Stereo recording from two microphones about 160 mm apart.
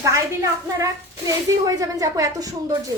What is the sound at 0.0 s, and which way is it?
A woman's voice, 20° right (ahead or behind).